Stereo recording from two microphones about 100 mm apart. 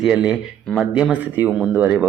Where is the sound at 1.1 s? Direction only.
15° right (ahead or behind).